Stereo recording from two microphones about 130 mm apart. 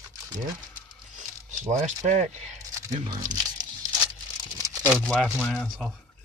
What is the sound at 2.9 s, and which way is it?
Speech, 35° right (ahead or behind).